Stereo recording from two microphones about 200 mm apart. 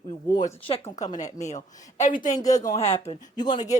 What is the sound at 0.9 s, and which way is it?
Speech, 35° left (ahead or behind).